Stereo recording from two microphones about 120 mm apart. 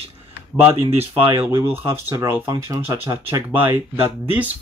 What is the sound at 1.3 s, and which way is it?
Speech, 20° right (ahead or behind).